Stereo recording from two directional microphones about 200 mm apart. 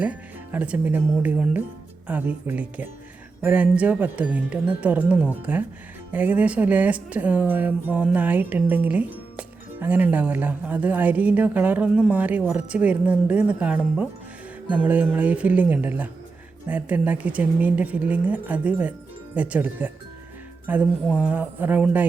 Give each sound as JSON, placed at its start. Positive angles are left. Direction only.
{"t": 0.0, "sound": "speech", "side_deg": -5}